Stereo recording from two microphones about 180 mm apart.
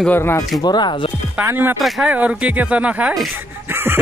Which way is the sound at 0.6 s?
25° left (ahead or behind).